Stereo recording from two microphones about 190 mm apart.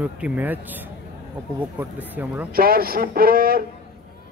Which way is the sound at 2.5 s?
50° right (ahead or behind).